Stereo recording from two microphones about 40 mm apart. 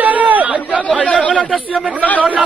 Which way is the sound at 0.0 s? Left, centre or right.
Right.